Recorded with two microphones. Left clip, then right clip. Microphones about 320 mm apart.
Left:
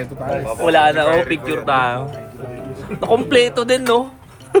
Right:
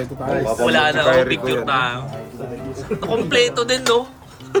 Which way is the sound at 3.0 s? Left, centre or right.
Centre.